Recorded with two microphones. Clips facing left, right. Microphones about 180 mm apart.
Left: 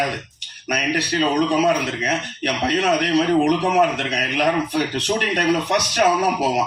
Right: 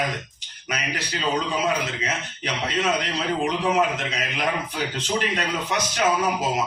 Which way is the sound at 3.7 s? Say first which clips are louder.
Left 5 dB; 65° left (ahead or behind).